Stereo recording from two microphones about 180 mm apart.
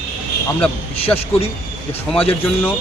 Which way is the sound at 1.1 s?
10° left (ahead or behind).